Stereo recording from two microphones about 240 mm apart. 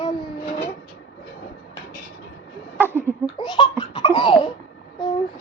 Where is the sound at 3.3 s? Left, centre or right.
Centre.